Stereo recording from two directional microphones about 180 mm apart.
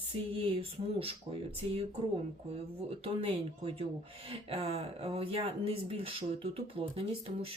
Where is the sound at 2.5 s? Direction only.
30° right (ahead or behind).